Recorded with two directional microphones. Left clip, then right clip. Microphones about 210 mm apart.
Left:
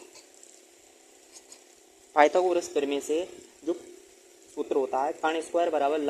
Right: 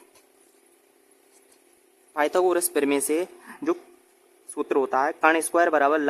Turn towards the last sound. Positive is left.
turn(degrees=-25)  # may be behind; listen again after turning